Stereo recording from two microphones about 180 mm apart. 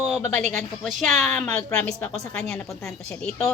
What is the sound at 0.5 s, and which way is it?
A woman's voice, centre (ahead or behind).